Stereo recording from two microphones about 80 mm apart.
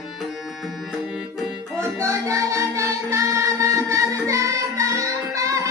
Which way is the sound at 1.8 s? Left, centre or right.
Right.